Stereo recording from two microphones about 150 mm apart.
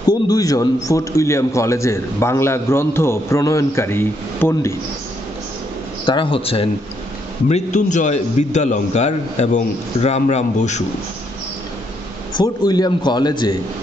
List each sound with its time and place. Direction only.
0.1 s a man's voice: 25° left (ahead or behind)
6.0 s a man's voice: 35° left (ahead or behind)
7.4 s a man's voice: 50° left (ahead or behind)
12.4 s a man's voice: 25° left (ahead or behind)